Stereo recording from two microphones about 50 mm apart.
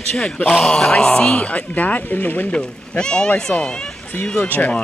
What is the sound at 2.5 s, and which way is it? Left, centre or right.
Speech, centre.